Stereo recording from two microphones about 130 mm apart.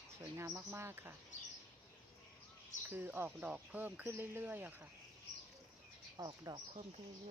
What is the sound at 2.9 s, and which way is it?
Speech, 15° right (ahead or behind).